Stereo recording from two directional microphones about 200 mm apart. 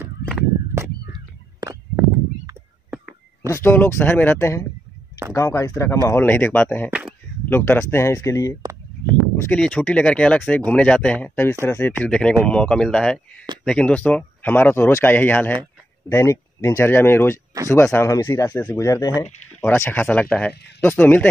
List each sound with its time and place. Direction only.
0.7 s crow: 15° right (ahead or behind)
3.4 s speech: 15° left (ahead or behind)
6.9 s a sound: 5° right (ahead or behind)
7.4 s speech: 10° left (ahead or behind)